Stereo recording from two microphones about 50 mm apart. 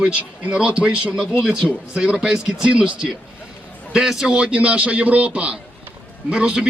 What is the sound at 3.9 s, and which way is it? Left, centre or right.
Speech, centre.